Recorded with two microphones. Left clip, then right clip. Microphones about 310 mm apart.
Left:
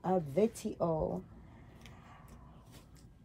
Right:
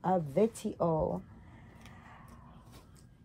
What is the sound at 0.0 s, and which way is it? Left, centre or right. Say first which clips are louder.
A woman's voice: right 2 dB; right.